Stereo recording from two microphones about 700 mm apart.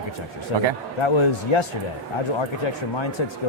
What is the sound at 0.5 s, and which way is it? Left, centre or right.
A man's voice, left.